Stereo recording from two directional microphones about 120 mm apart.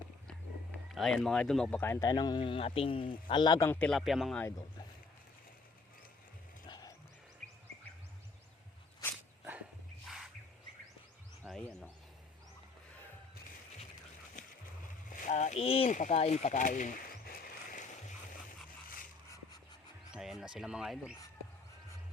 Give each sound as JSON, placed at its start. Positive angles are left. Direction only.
{"t": 0.9, "sound": "speech", "side_deg": 5}
{"t": 2.0, "sound": "speech", "side_deg": 35}
{"t": 3.8, "sound": "speech", "side_deg": 5}
{"t": 6.7, "sound": "music", "side_deg": 35}
{"t": 9.4, "sound": "music", "side_deg": -15}
{"t": 11.4, "sound": "a sound", "side_deg": -15}
{"t": 14.4, "sound": "splash", "side_deg": 90}
{"t": 15.1, "sound": "speech", "side_deg": 85}
{"t": 15.9, "sound": "speech", "side_deg": 85}
{"t": 17.6, "sound": "a sound", "side_deg": 90}
{"t": 20.1, "sound": "speech", "side_deg": -5}